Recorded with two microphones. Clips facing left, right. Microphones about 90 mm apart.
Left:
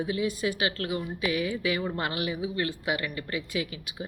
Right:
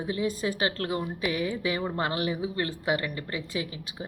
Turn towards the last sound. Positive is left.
turn(degrees=-30)  # may be behind; listen again after turning